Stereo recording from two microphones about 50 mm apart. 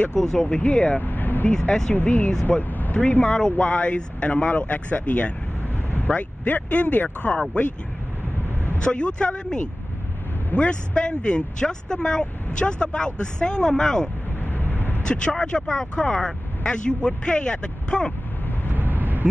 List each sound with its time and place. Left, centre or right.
0.1 s speech: centre
0.6 s speech: left
1.0 s vehicle: left
1.7 s speech: centre
2.0 s speech: left
3.3 s speech: centre
8.8 s speech: centre
14.4 s vehicle: left
15.0 s speech: centre
18.7 s vehicle: right